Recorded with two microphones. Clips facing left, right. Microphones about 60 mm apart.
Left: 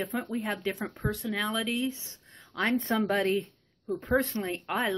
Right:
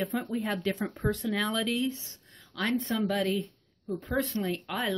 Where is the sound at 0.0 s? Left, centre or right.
Centre.